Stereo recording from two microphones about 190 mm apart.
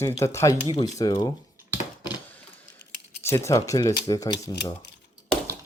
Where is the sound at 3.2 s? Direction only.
15° left (ahead or behind).